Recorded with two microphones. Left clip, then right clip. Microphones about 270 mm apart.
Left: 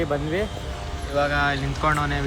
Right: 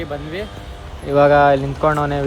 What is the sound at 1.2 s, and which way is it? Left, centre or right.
Speech, centre.